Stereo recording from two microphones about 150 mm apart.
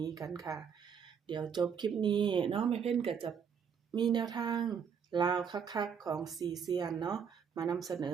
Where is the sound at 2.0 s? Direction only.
30° right (ahead or behind).